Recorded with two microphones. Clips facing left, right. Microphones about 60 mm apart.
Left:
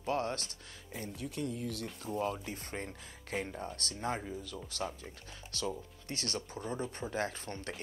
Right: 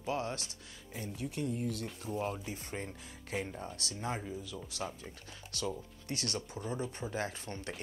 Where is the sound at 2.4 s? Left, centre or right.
Left.